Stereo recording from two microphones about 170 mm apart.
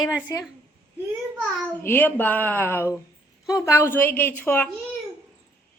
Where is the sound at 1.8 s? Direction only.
15° left (ahead or behind).